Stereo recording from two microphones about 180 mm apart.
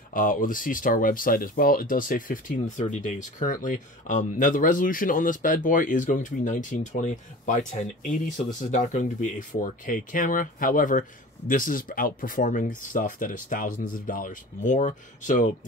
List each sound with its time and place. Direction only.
0.1 s speech: 50° left (ahead or behind)